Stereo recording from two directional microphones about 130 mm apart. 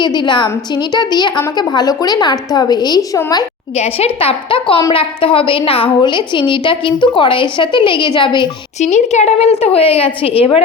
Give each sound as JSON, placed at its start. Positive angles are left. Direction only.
{"t": 0.0, "sound": "a woman's voice", "side_deg": 35}
{"t": 3.8, "sound": "a woman's voice", "side_deg": 50}
{"t": 8.8, "sound": "a woman's voice", "side_deg": 60}